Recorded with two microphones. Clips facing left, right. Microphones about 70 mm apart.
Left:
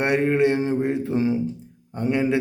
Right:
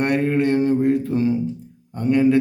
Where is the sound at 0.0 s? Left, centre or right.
Centre.